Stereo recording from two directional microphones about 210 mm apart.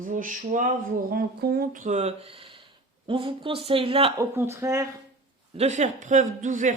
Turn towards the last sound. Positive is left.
turn(degrees=-35)  # may be behind; listen again after turning